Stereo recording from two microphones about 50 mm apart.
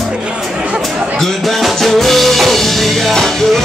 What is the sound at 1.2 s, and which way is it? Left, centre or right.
Music, centre.